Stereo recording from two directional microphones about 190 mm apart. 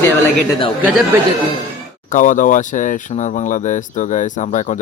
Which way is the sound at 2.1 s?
45° left (ahead or behind).